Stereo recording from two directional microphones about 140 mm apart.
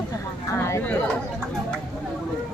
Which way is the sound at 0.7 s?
20° left (ahead or behind).